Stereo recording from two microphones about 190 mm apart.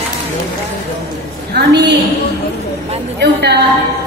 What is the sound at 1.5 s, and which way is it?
Speech, 60° right (ahead or behind).